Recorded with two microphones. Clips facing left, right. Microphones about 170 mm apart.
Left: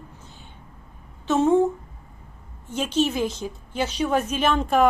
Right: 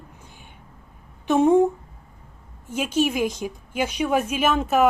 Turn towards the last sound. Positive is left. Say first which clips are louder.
# even
turn(degrees=-5)  # may be behind; listen again after turning